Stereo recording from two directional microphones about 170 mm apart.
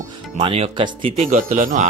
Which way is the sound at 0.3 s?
35° right (ahead or behind).